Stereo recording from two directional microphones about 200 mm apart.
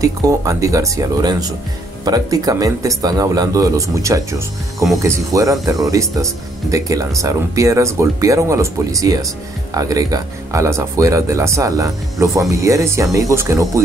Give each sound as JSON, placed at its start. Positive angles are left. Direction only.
{"t": 0.0, "sound": "speech", "side_deg": -15}